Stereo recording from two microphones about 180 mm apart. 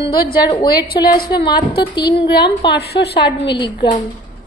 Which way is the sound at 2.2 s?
70° left (ahead or behind).